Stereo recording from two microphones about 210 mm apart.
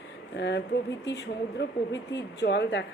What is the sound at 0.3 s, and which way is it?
Speech, 55° left (ahead or behind).